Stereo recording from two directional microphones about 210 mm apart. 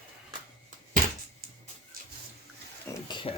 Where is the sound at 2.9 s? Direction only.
20° left (ahead or behind).